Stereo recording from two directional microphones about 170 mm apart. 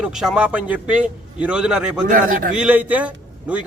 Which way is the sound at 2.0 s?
55° right (ahead or behind).